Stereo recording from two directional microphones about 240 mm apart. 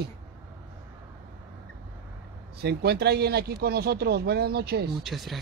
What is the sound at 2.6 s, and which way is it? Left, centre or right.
Speech, right.